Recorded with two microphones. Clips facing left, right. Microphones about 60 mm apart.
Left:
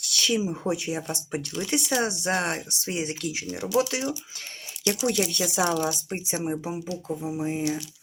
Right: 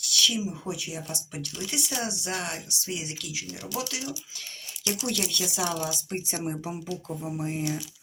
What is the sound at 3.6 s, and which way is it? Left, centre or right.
Speech, centre.